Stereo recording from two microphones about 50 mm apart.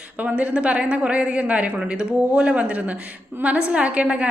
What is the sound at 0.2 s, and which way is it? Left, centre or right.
A woman's voice, right.